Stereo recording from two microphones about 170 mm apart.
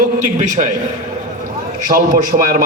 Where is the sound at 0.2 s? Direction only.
45° right (ahead or behind).